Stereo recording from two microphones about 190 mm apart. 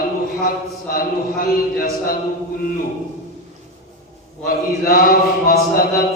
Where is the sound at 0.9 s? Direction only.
50° left (ahead or behind).